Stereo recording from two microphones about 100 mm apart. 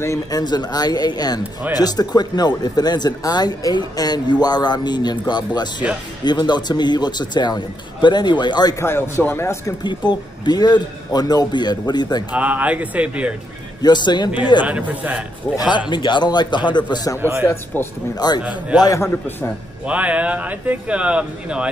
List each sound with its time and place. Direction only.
0.0 s speech: 30° left (ahead or behind)
0.4 s speech: 45° left (ahead or behind)
8.7 s speech: 25° left (ahead or behind)
9.8 s speech: 45° left (ahead or behind)
12.3 s speech: 15° right (ahead or behind)
13.8 s speech: 45° left (ahead or behind)
14.6 s speech: 15° right (ahead or behind)
15.5 s speech: 40° left (ahead or behind)
17.2 s speech: 25° right (ahead or behind)
17.7 s speech: 15° left (ahead or behind)
18.1 s speech: 45° left (ahead or behind)
18.4 s speech: 15° right (ahead or behind)
18.8 s speech: 30° left (ahead or behind)
19.9 s speech: 15° right (ahead or behind)